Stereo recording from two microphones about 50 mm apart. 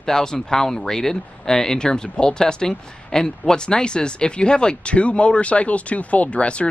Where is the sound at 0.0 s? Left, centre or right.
Centre.